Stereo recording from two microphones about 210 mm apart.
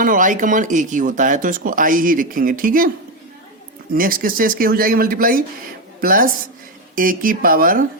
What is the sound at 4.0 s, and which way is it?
Speech, 40° right (ahead or behind).